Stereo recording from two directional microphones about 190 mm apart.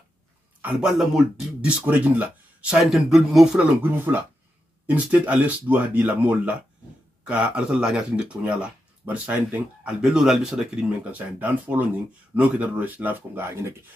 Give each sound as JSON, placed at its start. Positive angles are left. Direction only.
{"t": 0.6, "sound": "speech", "side_deg": -5}